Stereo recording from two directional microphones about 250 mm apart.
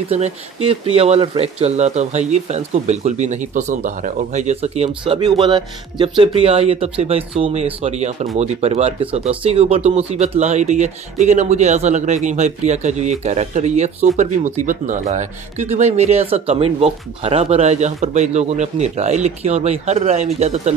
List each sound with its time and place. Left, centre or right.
0.1 s speech: right